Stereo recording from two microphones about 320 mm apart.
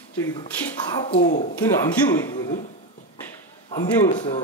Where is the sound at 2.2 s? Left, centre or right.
Centre.